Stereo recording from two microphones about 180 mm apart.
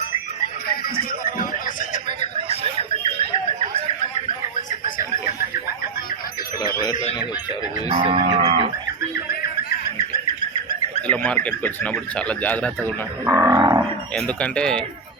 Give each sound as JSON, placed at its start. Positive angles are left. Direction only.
{"t": 0.9, "sound": "music", "side_deg": 50}
{"t": 8.0, "sound": "livestock", "side_deg": -30}
{"t": 11.1, "sound": "speech", "side_deg": 10}
{"t": 13.2, "sound": "livestock", "side_deg": -15}
{"t": 14.2, "sound": "speech", "side_deg": 5}